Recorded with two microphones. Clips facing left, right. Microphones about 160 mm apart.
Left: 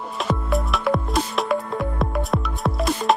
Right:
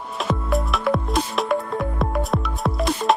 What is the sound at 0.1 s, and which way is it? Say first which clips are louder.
Music: right 1 dB; centre (ahead or behind).